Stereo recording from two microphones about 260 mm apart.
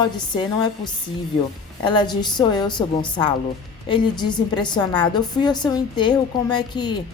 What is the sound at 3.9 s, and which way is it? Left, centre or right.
A woman's voice, centre.